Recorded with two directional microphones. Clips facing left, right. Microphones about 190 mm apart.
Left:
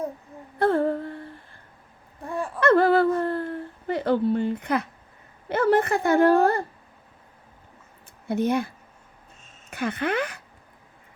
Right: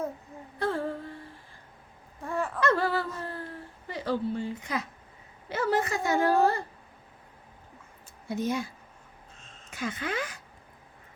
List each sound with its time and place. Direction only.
0.6 s humming: 55° left (ahead or behind)
2.2 s a sound: 15° left (ahead or behind)
2.6 s a woman's voice: 55° left (ahead or behind)
8.3 s a woman's voice: 60° left (ahead or behind)